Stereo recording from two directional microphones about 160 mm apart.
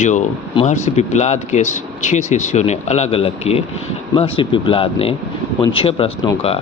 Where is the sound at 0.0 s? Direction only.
50° left (ahead or behind).